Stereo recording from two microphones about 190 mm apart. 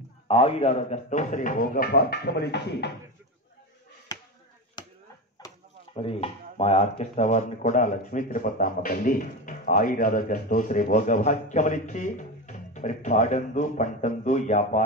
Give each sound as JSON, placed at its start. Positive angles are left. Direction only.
{"t": 0.3, "sound": "speech", "side_deg": 30}
{"t": 4.8, "sound": "chop", "side_deg": 25}
{"t": 5.4, "sound": "a sound", "side_deg": 20}
{"t": 5.9, "sound": "speech", "side_deg": 30}